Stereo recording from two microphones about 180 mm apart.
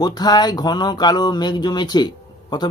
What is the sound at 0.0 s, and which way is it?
Speech, 20° left (ahead or behind).